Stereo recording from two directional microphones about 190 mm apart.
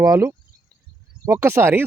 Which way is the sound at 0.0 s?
15° right (ahead or behind).